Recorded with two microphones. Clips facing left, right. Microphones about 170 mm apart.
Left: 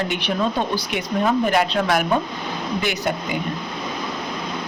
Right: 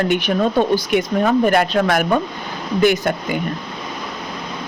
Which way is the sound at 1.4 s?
50° right (ahead or behind).